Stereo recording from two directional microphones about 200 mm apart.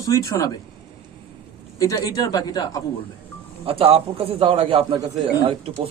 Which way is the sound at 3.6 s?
30° right (ahead or behind).